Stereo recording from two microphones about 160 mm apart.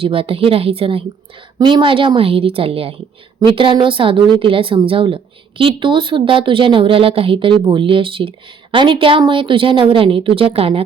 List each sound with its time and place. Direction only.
0.0 s a woman's voice: 35° right (ahead or behind)